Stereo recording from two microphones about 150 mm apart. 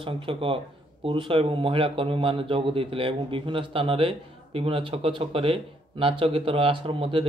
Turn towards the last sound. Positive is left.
turn(degrees=-35)  # may be behind; listen again after turning